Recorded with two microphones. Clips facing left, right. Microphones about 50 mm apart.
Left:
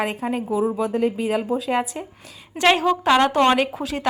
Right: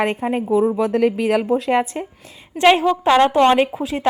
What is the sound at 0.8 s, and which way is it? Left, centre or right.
Speech, right.